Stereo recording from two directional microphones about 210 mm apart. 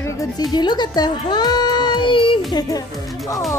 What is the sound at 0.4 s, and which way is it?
A child's voice, 20° left (ahead or behind).